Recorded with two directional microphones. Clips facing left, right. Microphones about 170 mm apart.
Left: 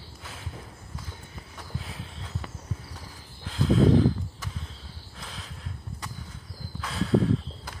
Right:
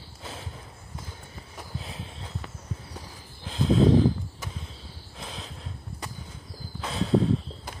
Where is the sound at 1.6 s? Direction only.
25° right (ahead or behind).